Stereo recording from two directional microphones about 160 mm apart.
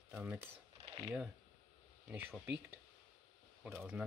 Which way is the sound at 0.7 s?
30° right (ahead or behind).